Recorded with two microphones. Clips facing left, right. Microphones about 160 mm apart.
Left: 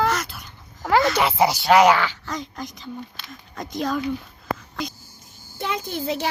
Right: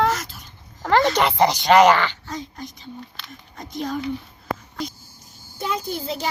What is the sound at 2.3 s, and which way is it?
A woman's voice, 90° left.